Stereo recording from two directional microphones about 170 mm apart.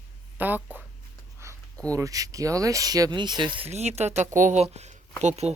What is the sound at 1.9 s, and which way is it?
Speech, 20° right (ahead or behind).